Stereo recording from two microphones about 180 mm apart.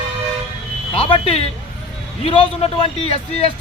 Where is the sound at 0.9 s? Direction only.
30° left (ahead or behind).